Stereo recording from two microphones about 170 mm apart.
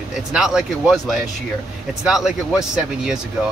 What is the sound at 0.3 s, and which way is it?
Speech, 5° right (ahead or behind).